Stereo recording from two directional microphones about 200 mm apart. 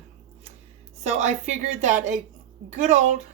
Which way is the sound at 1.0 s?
35° right (ahead or behind).